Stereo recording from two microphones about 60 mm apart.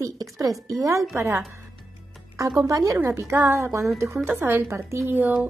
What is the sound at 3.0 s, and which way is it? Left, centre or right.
Speech, right.